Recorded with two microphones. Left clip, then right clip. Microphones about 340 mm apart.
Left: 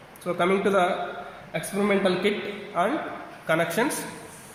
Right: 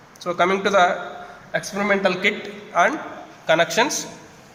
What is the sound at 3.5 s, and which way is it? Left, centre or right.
Speech, right.